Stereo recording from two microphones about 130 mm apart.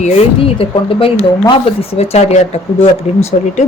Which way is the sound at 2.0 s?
55° left (ahead or behind).